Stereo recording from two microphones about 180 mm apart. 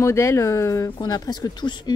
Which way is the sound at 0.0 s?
15° left (ahead or behind).